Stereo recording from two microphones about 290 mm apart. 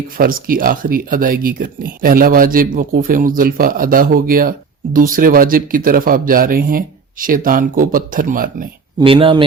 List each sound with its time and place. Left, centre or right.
0.2 s speech: right
9.0 s speech: centre